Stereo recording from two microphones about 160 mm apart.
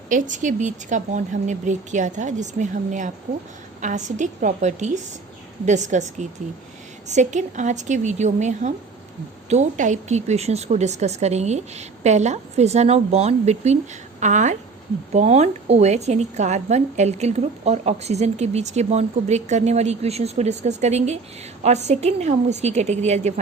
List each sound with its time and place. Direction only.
0.1 s a woman's voice: 50° right (ahead or behind)